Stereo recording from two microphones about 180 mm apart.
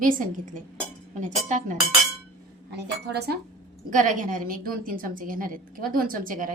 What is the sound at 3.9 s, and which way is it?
A woman's voice, 45° right (ahead or behind).